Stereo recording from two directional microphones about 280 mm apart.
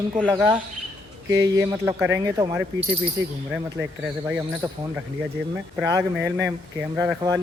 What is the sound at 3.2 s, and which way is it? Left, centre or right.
Speech, right.